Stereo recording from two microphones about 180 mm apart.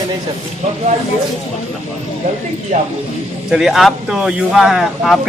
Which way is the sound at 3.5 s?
Centre (ahead or behind).